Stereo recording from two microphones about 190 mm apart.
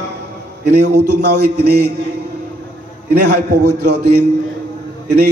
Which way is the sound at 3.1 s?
60° right (ahead or behind).